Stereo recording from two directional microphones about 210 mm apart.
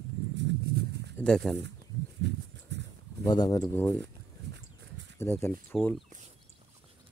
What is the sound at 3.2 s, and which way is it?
Speech, 20° left (ahead or behind).